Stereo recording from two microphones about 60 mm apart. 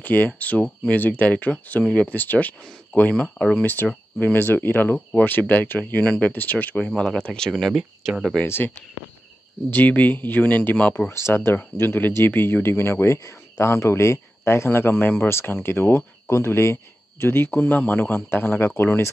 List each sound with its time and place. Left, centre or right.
0.0 s speech: left
3.3 s speech: centre
3.6 s a man's voice: left
6.9 s speech: centre
7.5 s speech: centre
8.1 s speech: centre
8.5 s a man's voice: left
11.1 s a man's voice: left